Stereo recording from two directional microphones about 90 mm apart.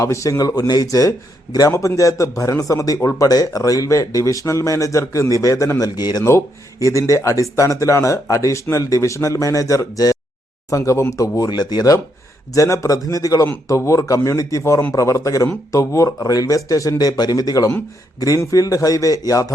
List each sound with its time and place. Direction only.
0.0 s a man's voice: 35° left (ahead or behind)
6.0 s speech: 50° left (ahead or behind)
6.2 s a man's voice: 35° left (ahead or behind)
11.4 s speech: 50° left (ahead or behind)
12.5 s a man's voice: 35° left (ahead or behind)